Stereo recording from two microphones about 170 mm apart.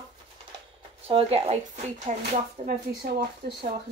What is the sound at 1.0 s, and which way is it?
Speech, 35° right (ahead or behind).